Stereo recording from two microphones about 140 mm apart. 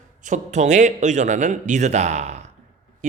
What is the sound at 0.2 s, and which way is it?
A man's voice, 60° right (ahead or behind).